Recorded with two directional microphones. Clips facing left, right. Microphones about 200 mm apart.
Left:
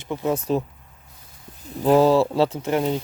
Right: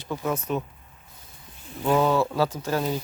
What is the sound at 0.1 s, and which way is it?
Speech, 20° left (ahead or behind).